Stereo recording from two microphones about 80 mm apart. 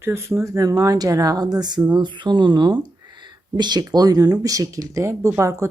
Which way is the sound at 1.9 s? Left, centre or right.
Right.